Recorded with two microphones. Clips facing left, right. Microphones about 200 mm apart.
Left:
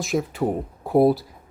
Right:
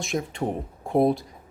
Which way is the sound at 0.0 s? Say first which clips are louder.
Left 4 dB; centre (ahead or behind).